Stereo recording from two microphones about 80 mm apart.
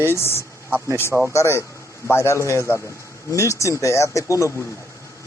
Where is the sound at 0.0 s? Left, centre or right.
Left.